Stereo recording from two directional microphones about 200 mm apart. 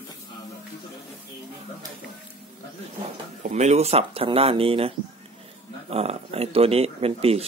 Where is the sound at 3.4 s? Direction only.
35° right (ahead or behind).